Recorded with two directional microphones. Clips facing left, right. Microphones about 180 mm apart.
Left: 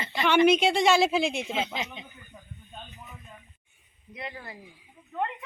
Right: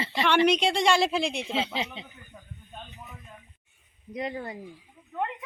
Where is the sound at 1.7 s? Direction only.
30° right (ahead or behind).